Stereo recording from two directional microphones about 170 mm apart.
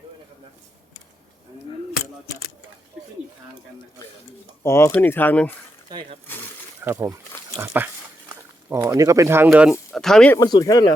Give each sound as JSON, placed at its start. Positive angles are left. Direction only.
{"t": 4.6, "sound": "speech", "side_deg": 15}
{"t": 5.9, "sound": "roaring cats", "side_deg": -30}
{"t": 6.8, "sound": "speech", "side_deg": -15}
{"t": 9.9, "sound": "speech", "side_deg": 0}
{"t": 10.3, "sound": "speech", "side_deg": 20}